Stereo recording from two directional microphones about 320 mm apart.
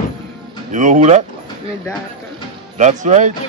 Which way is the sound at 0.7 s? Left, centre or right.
Right.